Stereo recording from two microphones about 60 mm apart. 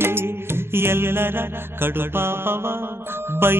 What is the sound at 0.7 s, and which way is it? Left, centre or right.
Music, right.